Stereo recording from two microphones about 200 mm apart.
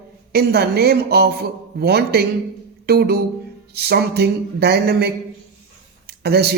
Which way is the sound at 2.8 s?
55° right (ahead or behind).